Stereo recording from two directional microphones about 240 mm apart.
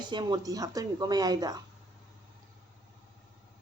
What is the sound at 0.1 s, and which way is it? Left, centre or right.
A woman's voice, centre.